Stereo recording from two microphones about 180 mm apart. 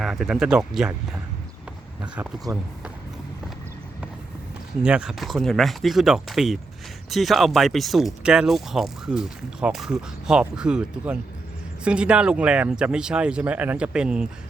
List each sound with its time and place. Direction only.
0.0 s speech: centre (ahead or behind)
2.5 s speech: 20° right (ahead or behind)
4.8 s speech: 5° right (ahead or behind)